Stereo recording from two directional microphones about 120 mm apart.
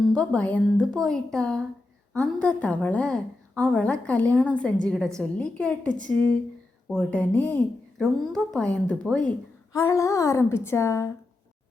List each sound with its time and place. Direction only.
0.1 s a woman's voice: 10° left (ahead or behind)
9.7 s a woman's voice: 25° left (ahead or behind)